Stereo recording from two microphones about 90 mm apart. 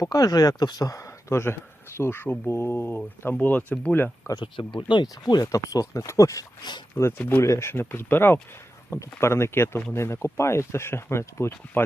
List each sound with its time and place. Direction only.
0.0 s speech: 45° left (ahead or behind); by 4.3 s 20° left (ahead or behind)
4.4 s speech: 60° left (ahead or behind)
5.2 s speech: 45° left (ahead or behind)
6.6 s speech: 55° left (ahead or behind)
6.9 s speech: 25° left (ahead or behind)